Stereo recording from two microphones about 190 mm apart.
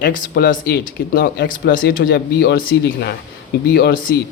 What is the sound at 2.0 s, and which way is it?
Speech, 60° left (ahead or behind).